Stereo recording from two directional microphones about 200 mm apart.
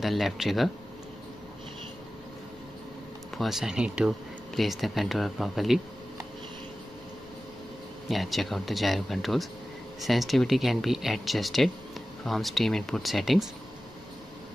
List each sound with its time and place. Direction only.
0.0 s speech: centre (ahead or behind)
3.3 s speech: centre (ahead or behind)
8.1 s speech: centre (ahead or behind)